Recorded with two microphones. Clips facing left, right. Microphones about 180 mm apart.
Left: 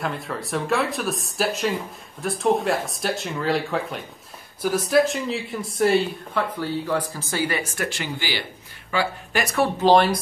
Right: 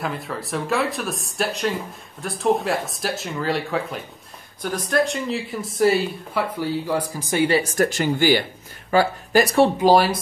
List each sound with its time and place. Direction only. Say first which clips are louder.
0.0 s speech: even; centre (ahead or behind); by 7.4 s 15° right (ahead or behind)
7.4 s speech: right 10 dB; 35° right (ahead or behind)
8.9 s speech: right 7 dB; 35° right (ahead or behind)
9.8 s speech: left 3 dB; 10° right (ahead or behind)